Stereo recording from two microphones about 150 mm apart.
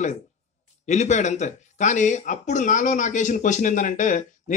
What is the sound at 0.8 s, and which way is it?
Speech, 50° left (ahead or behind).